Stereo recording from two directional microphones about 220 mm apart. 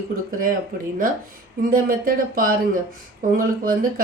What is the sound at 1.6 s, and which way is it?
Speech, 40° right (ahead or behind).